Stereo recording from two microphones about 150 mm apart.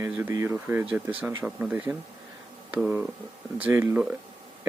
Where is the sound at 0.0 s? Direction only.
20° right (ahead or behind).